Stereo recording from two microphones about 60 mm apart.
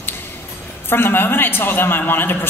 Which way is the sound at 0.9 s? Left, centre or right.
Left.